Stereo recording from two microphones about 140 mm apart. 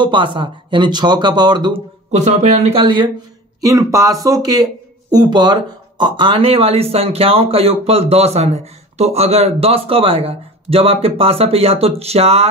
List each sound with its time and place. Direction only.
0.0 s speech: 35° right (ahead or behind)
2.0 s speech: 55° right (ahead or behind)
2.8 s speech: 35° right (ahead or behind)
3.6 s speech: 25° right (ahead or behind); by 12.4 s 50° right (ahead or behind)